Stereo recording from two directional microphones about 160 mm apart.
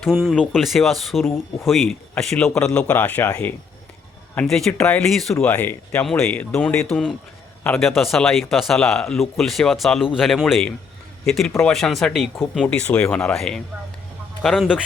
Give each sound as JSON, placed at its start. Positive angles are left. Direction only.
{"t": 0.0, "sound": "a man's voice", "side_deg": 0}
{"t": 7.9, "sound": "speech", "side_deg": 0}